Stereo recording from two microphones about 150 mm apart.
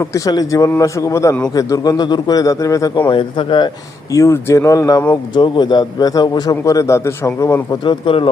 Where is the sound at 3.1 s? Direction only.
35° left (ahead or behind).